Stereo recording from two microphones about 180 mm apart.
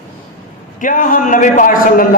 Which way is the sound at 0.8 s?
45° left (ahead or behind).